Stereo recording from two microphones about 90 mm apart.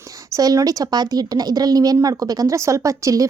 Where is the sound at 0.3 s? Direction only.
40° right (ahead or behind).